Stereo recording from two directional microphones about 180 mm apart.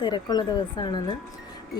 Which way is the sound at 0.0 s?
25° left (ahead or behind).